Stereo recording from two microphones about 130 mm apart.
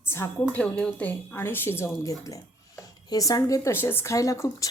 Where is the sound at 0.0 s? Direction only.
20° left (ahead or behind).